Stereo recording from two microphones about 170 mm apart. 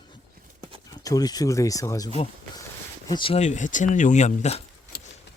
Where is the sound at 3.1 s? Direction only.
30° left (ahead or behind).